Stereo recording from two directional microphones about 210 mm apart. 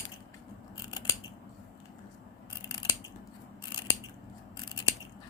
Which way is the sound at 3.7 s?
20° left (ahead or behind).